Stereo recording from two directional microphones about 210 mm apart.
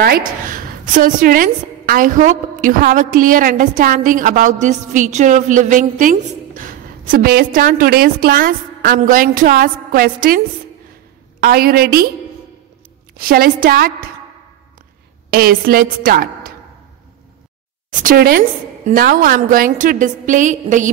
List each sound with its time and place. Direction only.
0.0 s a woman's voice: 45° right (ahead or behind)
11.4 s a woman's voice: 45° right (ahead or behind)
13.2 s a woman's voice: 45° right (ahead or behind)
15.3 s a woman's voice: 45° right (ahead or behind)
18.0 s a woman's voice: 45° right (ahead or behind)